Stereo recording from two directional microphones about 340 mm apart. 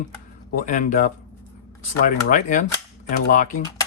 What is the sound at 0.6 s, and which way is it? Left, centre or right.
Speech, left.